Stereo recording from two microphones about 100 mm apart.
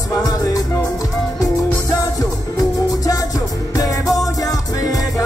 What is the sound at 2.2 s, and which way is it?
Music, 35° left (ahead or behind).